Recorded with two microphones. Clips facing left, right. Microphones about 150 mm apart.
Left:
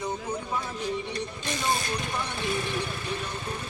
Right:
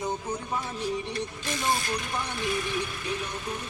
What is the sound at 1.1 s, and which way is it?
Speech, 30° left (ahead or behind).